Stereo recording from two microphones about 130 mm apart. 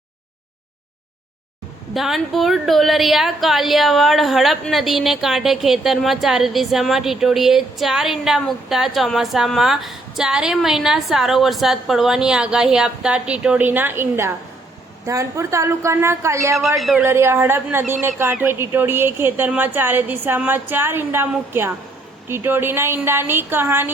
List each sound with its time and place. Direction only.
1.9 s a woman's voice: centre (ahead or behind); by 16.6 s 20° right (ahead or behind)
16.6 s a woman's voice: centre (ahead or behind)
17.0 s speech: 20° right (ahead or behind)